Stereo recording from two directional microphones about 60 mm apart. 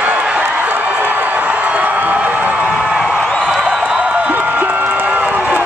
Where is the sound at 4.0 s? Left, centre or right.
Centre.